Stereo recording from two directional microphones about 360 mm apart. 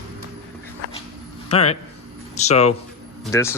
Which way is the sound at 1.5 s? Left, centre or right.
Centre.